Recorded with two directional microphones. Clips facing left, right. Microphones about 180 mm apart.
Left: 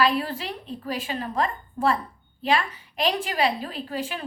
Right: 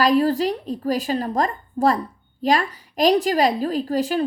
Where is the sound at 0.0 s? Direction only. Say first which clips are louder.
Right 7 dB; 40° right (ahead or behind).